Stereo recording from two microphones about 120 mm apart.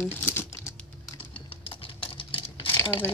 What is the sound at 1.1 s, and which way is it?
Typing, 45° left (ahead or behind).